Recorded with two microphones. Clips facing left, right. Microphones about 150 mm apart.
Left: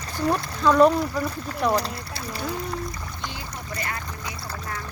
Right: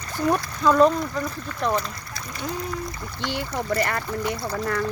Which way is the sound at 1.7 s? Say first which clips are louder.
Left 2 dB; 35° left (ahead or behind).